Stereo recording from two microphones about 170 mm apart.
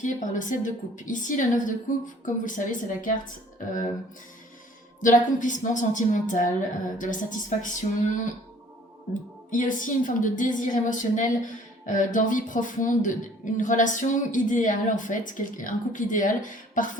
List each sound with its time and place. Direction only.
0.0 s a woman's voice: 50° left (ahead or behind)
5.0 s a woman's voice: 50° left (ahead or behind)
9.5 s a woman's voice: 50° left (ahead or behind)